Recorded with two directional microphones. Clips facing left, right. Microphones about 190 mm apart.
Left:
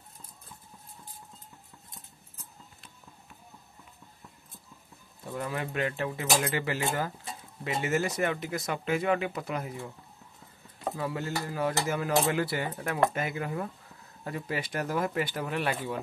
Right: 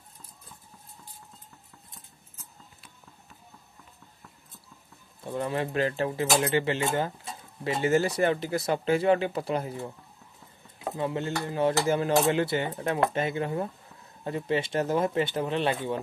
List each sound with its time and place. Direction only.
5.2 s speech: 30° right (ahead or behind)
11.0 s speech: 25° right (ahead or behind)